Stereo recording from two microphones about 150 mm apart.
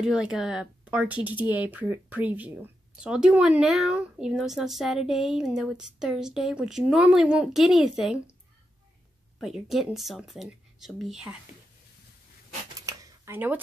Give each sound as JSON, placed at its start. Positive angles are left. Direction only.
{"t": 0.0, "sound": "a woman's voice", "side_deg": -5}
{"t": 9.4, "sound": "a woman's voice", "side_deg": 0}
{"t": 12.7, "sound": "a sound", "side_deg": -20}